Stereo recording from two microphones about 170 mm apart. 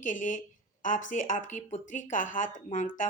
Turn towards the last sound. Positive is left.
turn(degrees=50)  # may be behind; listen again after turning